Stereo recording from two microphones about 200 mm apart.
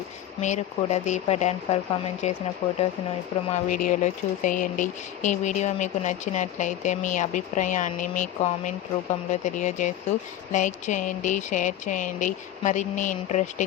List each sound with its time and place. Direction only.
0.4 s speech: 35° left (ahead or behind)
3.5 s speech: 40° left (ahead or behind)